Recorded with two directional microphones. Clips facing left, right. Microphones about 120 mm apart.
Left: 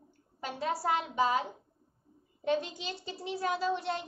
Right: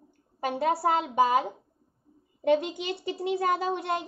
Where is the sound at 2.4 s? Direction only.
60° right (ahead or behind).